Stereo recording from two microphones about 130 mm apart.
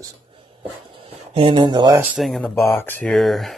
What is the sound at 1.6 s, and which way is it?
Speech, 35° right (ahead or behind).